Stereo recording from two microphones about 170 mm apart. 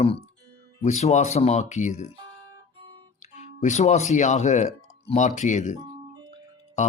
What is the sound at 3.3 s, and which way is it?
Speech, 45° left (ahead or behind).